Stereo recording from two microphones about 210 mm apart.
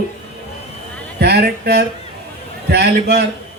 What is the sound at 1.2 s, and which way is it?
A man's voice, 50° right (ahead or behind).